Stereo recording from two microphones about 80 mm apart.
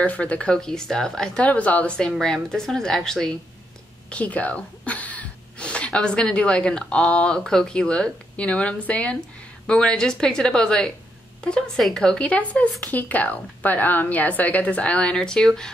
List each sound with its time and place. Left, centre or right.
0.0 s speech: centre
4.1 s a woman's voice: centre